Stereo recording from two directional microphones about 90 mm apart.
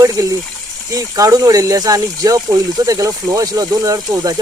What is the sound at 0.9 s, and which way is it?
Speech, 40° right (ahead or behind).